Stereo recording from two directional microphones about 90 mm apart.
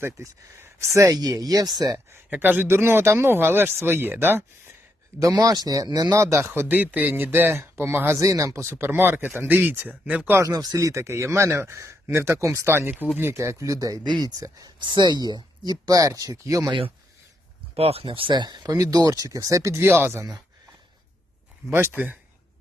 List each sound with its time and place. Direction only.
0.0 s speech: 30° right (ahead or behind); by 2.0 s 45° right (ahead or behind)
2.0 s a man's voice: 25° right (ahead or behind)
5.2 s speech: 45° right (ahead or behind)
6.2 s a man's voice: 30° right (ahead or behind)
10.3 s speech: 40° right (ahead or behind)
14.8 s speech: 60° right (ahead or behind); by 16.7 s 40° right (ahead or behind)
17.7 s speech: 90° right; by 20.3 s 30° right (ahead or behind)
21.7 s a man's voice: 25° right (ahead or behind)